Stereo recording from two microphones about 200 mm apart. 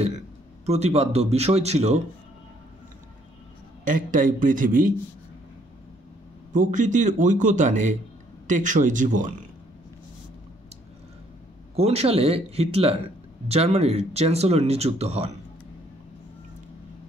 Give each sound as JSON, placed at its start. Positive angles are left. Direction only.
{"t": 0.7, "sound": "speech", "side_deg": -30}
{"t": 3.8, "sound": "speech", "side_deg": -40}
{"t": 6.5, "sound": "speech", "side_deg": -40}
{"t": 11.7, "sound": "speech", "side_deg": -30}